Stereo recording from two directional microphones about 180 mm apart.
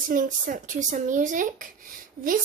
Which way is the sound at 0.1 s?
45° right (ahead or behind).